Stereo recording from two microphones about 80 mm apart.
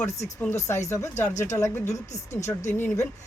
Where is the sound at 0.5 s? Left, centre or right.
Left.